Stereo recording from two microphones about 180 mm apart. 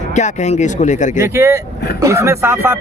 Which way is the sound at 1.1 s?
15° right (ahead or behind).